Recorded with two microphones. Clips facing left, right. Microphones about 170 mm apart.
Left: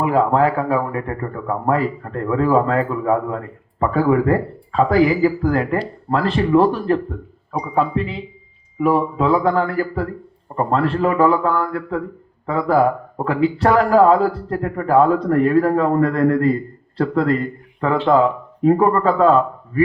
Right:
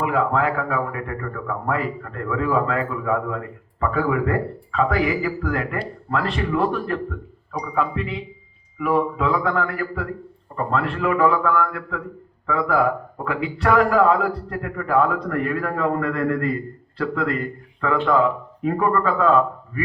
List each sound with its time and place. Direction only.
0.0 s speech: 35° left (ahead or behind)